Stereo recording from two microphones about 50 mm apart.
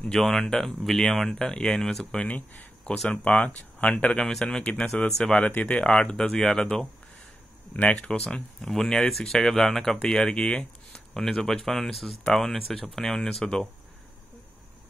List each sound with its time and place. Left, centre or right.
0.0 s speech: centre
2.2 s speech: left
4.3 s speech: centre
5.5 s speech: left
5.8 s speech: left
7.7 s speech: left
8.0 s speech: centre
11.1 s speech: centre